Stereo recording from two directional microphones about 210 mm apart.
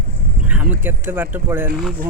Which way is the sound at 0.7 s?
10° right (ahead or behind).